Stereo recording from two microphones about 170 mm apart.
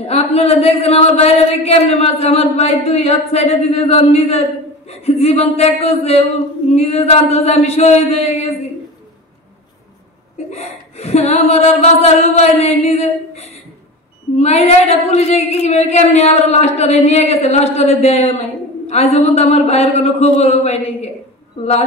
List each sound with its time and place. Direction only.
0.0 s speech: 35° left (ahead or behind)
10.5 s a sound: 40° left (ahead or behind)
14.4 s speech: 40° left (ahead or behind)